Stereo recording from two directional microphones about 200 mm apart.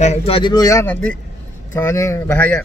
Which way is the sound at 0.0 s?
30° left (ahead or behind).